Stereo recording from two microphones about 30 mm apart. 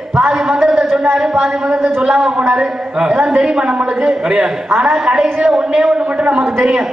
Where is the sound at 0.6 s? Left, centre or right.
Centre.